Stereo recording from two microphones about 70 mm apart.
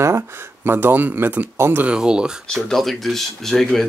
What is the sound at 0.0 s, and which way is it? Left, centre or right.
Speech, right.